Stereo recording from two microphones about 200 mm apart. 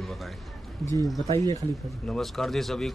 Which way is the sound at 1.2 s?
20° right (ahead or behind).